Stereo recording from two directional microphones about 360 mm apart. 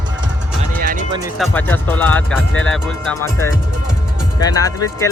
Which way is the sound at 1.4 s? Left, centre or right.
Centre.